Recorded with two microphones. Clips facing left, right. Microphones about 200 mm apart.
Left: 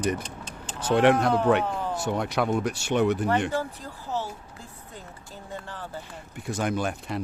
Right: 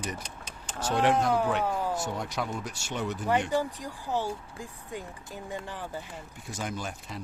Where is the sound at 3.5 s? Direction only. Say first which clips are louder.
Right 1 dB; 15° right (ahead or behind).